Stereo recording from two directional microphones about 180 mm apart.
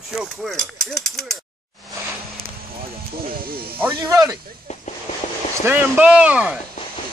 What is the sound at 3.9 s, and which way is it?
Speech, 20° right (ahead or behind).